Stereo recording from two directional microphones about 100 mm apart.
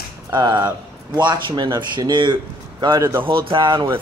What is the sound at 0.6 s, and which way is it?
A man's voice, 50° right (ahead or behind).